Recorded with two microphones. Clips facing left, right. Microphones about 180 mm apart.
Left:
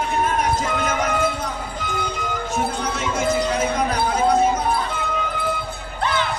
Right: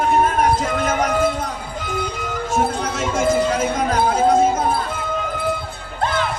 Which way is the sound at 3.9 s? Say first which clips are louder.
Right 6 dB; 45° right (ahead or behind).